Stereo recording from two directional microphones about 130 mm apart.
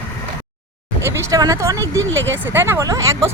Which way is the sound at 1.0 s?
25° right (ahead or behind).